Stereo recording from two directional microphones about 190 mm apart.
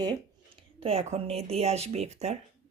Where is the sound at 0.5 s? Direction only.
30° right (ahead or behind).